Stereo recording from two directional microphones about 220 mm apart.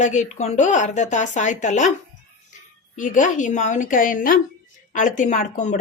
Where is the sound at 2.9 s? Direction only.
35° left (ahead or behind).